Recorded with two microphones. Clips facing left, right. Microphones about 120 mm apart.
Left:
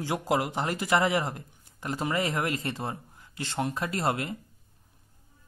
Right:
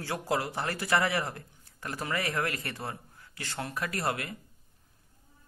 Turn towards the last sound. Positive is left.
turn(degrees=25)  # may be behind; listen again after turning